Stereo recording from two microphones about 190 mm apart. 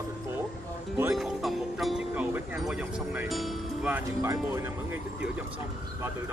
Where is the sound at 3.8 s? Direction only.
10° right (ahead or behind).